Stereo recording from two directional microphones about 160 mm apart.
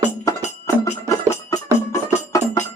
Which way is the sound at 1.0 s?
20° left (ahead or behind).